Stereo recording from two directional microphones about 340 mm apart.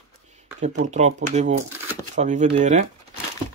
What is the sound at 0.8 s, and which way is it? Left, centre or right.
Speech, centre.